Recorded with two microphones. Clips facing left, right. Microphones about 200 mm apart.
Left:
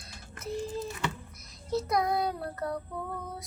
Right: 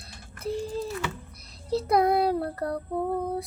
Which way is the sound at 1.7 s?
30° right (ahead or behind).